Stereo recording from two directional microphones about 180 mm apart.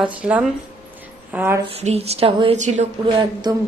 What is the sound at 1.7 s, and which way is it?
A woman's voice, 35° right (ahead or behind).